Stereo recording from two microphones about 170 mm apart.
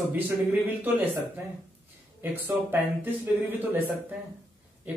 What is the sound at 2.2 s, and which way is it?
Speech, 10° right (ahead or behind).